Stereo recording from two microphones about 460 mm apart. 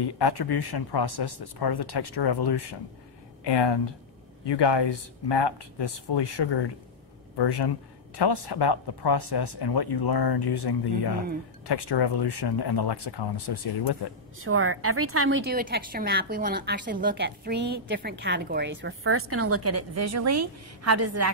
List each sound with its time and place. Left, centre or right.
0.0 s speech: left
14.4 s a woman's voice: right